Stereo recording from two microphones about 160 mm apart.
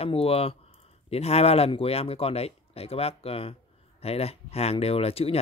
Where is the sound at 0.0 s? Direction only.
35° left (ahead or behind).